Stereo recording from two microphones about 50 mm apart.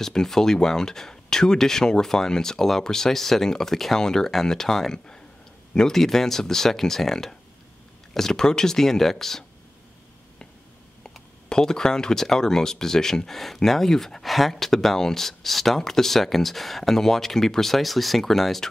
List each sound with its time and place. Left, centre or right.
0.0 s speech: centre
11.4 s speech: centre